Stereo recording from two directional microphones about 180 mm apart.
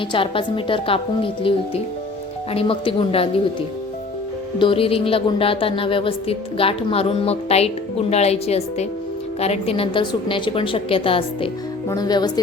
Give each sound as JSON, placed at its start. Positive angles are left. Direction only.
{"t": 0.1, "sound": "a woman's voice", "side_deg": 30}
{"t": 4.5, "sound": "a woman's voice", "side_deg": 30}